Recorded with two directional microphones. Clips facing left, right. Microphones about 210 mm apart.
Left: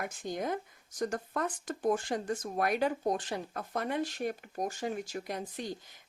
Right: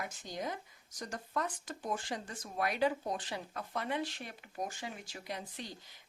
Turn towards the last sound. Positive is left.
turn(degrees=50)  # may be behind; listen again after turning